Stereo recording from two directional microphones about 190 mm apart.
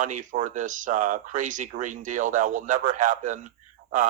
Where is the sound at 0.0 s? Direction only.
40° right (ahead or behind).